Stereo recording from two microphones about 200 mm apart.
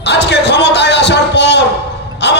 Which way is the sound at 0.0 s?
60° left (ahead or behind).